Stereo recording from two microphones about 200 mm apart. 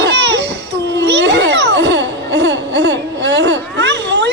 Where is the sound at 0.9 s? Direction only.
60° right (ahead or behind).